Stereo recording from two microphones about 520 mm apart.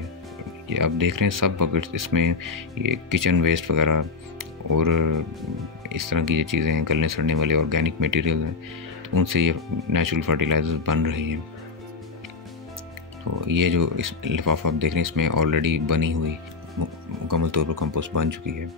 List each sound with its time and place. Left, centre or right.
0.7 s speech: right
13.4 s speech: right
17.3 s speech: right